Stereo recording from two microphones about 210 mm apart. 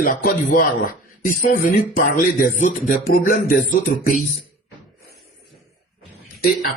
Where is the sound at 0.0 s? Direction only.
40° left (ahead or behind).